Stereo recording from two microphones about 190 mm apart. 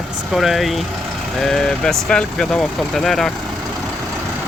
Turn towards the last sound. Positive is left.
turn(degrees=0)  # may be behind; listen again after turning